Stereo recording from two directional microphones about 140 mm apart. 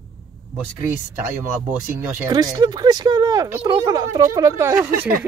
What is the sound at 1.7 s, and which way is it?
Speech, 15° right (ahead or behind).